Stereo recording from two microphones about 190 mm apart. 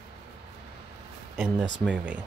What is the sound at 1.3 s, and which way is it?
Speech, 10° right (ahead or behind).